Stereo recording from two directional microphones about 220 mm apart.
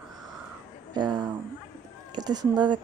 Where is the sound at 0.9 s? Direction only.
20° right (ahead or behind).